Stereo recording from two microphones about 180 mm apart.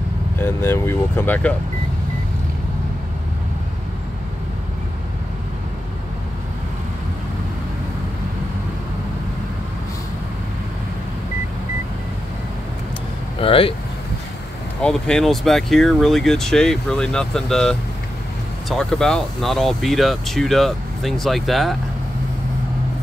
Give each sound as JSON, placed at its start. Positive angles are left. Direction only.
{"t": 0.4, "sound": "speech", "side_deg": 15}
{"t": 13.4, "sound": "speech", "side_deg": 30}
{"t": 14.8, "sound": "speech", "side_deg": 5}